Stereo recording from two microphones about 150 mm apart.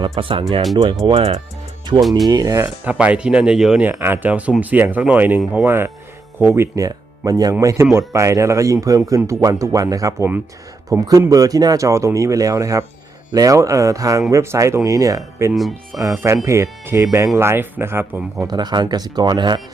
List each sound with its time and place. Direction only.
0.2 s speech: 35° right (ahead or behind)
2.0 s speech: centre (ahead or behind)
2.2 s speech: 25° right (ahead or behind)
2.8 s speech: 10° right (ahead or behind)
15.5 s speech: centre (ahead or behind)
16.1 s speech: 15° right (ahead or behind)
18.3 s speech: 30° right (ahead or behind)